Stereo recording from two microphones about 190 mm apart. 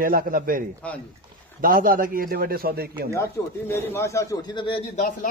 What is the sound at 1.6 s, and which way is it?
A man's voice, 50° right (ahead or behind).